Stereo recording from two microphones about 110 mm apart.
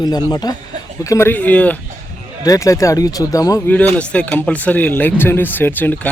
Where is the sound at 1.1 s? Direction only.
20° left (ahead or behind).